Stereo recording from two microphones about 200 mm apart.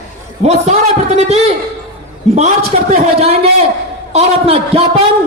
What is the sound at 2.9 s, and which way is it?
A man's voice, 30° right (ahead or behind).